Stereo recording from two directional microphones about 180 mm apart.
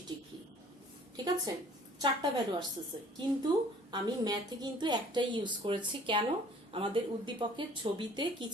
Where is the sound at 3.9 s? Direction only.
20° right (ahead or behind).